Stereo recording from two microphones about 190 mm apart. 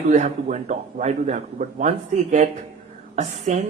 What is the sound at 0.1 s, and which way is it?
A man's voice, 40° right (ahead or behind).